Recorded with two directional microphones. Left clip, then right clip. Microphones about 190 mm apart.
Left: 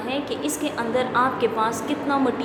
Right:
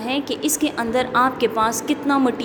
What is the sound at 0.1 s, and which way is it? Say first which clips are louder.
A woman's voice: right 4 dB; 45° right (ahead or behind).